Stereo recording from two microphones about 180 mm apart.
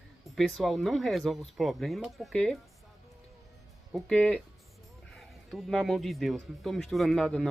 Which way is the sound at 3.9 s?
5° left (ahead or behind).